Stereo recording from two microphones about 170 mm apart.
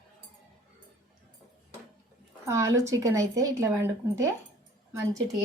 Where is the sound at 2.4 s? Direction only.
15° right (ahead or behind).